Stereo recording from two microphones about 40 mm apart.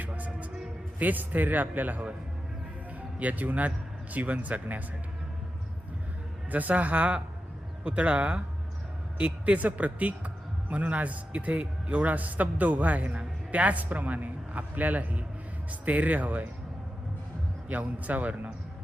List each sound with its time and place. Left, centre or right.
0.9 s a man's voice: right
3.2 s speech: right
6.5 s a man's voice: right
17.7 s speech: right